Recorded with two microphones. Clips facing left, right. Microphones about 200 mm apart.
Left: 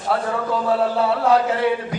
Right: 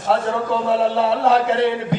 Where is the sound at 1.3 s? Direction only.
25° right (ahead or behind).